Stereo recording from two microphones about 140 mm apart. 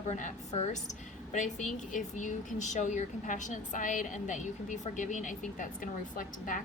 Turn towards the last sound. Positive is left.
turn(degrees=70)  # may be behind; listen again after turning